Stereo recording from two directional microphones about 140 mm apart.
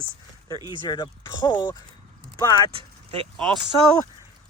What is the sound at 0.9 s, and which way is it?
Speech, 30° left (ahead or behind).